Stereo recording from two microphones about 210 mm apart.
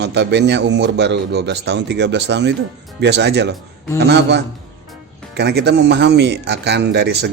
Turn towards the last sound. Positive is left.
turn(degrees=-55)  # may be behind; listen again after turning